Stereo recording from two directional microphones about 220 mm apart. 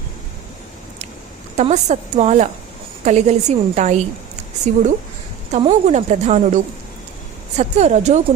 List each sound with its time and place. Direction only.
1.5 s a woman's voice: 30° right (ahead or behind)